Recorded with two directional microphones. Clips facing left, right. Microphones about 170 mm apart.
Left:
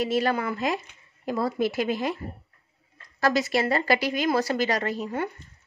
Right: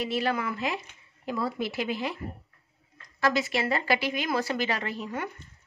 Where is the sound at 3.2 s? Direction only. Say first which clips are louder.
Left 3 dB; 40° left (ahead or behind).